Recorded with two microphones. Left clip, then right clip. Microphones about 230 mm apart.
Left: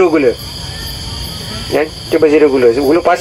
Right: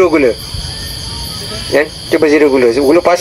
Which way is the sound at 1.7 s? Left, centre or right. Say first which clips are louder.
Right 2 dB; right.